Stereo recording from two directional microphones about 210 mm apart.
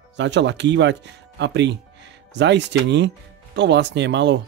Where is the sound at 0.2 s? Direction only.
55° right (ahead or behind).